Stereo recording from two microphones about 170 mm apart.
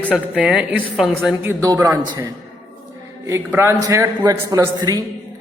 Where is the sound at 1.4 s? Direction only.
15° right (ahead or behind).